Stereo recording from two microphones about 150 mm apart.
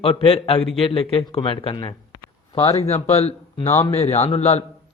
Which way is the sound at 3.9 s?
45° left (ahead or behind).